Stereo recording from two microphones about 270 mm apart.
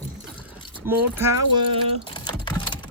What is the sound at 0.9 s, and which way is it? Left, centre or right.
Speech, centre.